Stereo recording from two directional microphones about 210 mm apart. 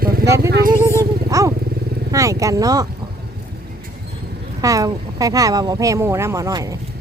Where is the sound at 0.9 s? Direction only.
15° right (ahead or behind).